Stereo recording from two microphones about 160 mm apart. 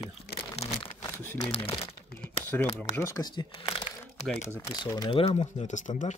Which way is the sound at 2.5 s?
10° left (ahead or behind).